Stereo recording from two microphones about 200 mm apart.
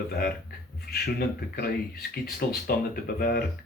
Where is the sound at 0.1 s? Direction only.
50° left (ahead or behind).